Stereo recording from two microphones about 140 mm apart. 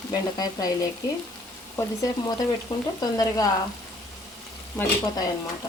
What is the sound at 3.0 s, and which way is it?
Frying, 25° left (ahead or behind).